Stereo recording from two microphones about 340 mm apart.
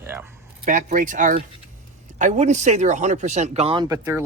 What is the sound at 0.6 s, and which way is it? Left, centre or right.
Speech, right.